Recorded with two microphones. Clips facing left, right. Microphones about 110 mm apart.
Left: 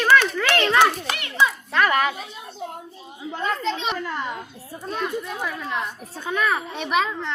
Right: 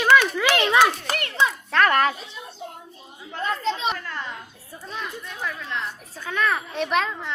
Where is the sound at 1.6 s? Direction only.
5° left (ahead or behind).